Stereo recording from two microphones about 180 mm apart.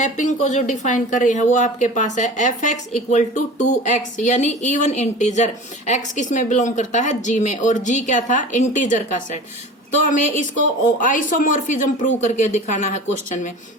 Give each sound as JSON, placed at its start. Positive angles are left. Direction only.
{"t": 0.0, "sound": "speech", "side_deg": 40}